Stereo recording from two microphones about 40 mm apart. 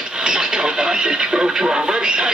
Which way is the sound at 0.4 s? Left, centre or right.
Centre.